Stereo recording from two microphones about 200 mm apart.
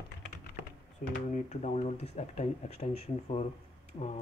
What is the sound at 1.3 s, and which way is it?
Speech, 35° left (ahead or behind).